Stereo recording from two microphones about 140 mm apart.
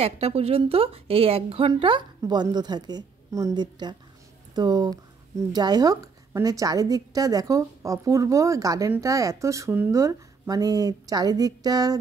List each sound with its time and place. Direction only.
0.0 s a woman's voice: 45° right (ahead or behind); by 12.0 s 25° right (ahead or behind)